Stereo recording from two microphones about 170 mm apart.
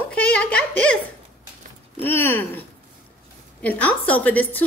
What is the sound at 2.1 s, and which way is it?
Speech, 15° left (ahead or behind).